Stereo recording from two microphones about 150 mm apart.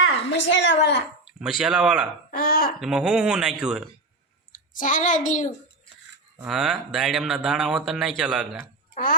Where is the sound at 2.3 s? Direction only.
80° left.